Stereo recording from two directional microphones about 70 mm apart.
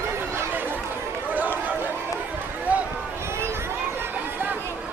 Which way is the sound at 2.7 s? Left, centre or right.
Right.